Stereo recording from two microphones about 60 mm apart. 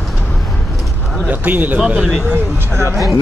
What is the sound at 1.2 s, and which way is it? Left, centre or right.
Speech, right.